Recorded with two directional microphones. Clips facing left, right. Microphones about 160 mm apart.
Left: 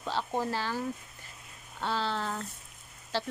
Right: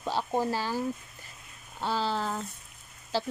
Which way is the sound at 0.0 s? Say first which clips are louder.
Right 3 dB; 15° right (ahead or behind).